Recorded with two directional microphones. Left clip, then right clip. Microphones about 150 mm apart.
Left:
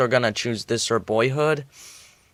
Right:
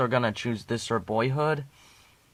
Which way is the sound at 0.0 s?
20° left (ahead or behind).